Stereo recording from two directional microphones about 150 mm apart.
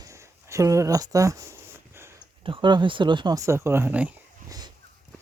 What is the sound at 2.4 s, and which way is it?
Speech, 35° right (ahead or behind).